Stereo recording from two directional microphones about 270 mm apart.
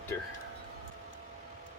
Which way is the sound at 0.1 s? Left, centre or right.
Centre.